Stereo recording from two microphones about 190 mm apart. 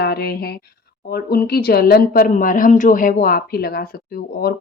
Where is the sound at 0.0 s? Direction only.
55° left (ahead or behind).